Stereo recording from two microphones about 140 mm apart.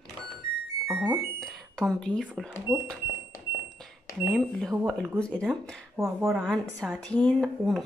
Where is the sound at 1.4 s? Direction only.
5° left (ahead or behind).